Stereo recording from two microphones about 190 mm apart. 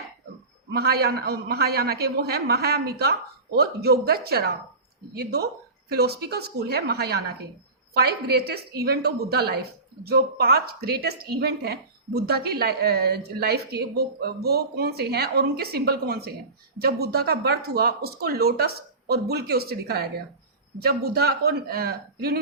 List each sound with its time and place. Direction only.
0.7 s a woman's voice: 55° right (ahead or behind)